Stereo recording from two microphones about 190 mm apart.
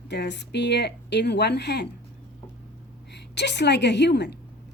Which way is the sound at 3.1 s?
65° left (ahead or behind).